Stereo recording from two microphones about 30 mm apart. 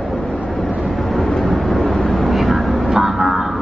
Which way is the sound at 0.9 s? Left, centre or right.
Centre.